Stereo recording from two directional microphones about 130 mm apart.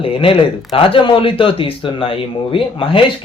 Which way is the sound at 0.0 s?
45° left (ahead or behind).